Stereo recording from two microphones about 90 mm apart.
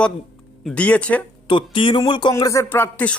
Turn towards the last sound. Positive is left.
turn(degrees=20)  # may be behind; listen again after turning